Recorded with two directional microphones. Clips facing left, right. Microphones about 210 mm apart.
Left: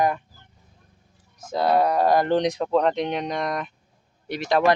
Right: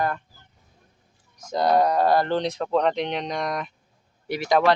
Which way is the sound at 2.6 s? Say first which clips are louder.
Left 1 dB; 5° left (ahead or behind).